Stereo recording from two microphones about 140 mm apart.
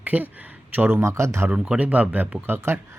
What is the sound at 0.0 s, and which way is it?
Speech, 10° right (ahead or behind).